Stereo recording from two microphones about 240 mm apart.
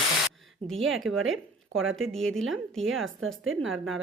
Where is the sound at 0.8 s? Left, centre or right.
Centre.